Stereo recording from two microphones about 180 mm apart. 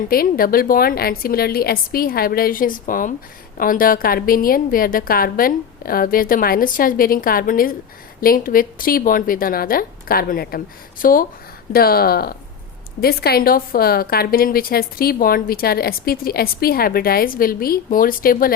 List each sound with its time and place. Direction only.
0.1 s a woman's voice: 55° left (ahead or behind)